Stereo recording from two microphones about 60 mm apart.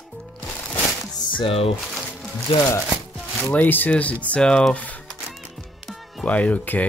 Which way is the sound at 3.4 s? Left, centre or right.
Left.